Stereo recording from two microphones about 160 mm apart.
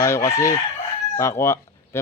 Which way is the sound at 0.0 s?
20° left (ahead or behind).